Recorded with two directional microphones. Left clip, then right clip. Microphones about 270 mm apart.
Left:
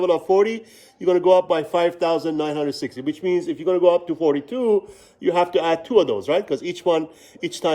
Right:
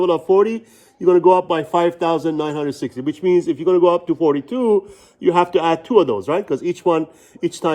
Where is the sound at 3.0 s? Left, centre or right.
Centre.